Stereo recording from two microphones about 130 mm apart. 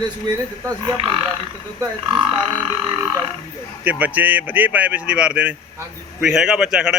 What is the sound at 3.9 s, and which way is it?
A man's voice, 10° right (ahead or behind).